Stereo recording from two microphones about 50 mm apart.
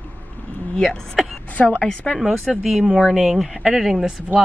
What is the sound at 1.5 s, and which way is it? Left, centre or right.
Speech, left.